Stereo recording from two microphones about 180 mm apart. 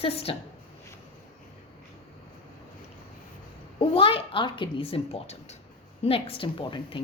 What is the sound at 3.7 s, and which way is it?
A woman's voice, 30° left (ahead or behind).